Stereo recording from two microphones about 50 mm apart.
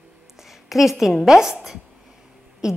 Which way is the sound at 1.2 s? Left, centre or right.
Centre.